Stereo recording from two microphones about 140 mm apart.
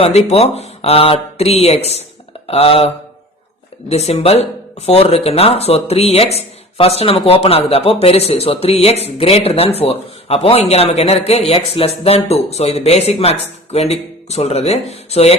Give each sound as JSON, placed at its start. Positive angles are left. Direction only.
{"t": 0.0, "sound": "speech", "side_deg": 50}